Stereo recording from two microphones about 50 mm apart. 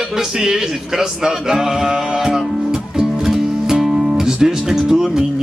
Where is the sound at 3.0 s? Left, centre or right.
Centre.